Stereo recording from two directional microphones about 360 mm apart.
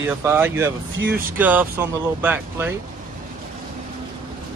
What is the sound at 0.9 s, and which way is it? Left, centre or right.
Speech, right.